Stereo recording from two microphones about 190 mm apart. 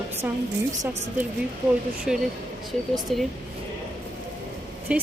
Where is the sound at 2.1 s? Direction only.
5° right (ahead or behind).